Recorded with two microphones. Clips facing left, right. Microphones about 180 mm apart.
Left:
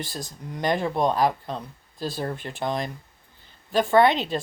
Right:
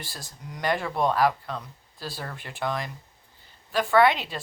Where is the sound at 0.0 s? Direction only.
20° left (ahead or behind).